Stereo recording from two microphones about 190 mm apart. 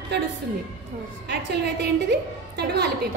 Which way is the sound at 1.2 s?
60° right (ahead or behind).